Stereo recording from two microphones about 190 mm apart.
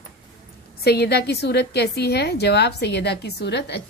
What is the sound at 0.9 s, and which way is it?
A woman's voice, 60° left (ahead or behind).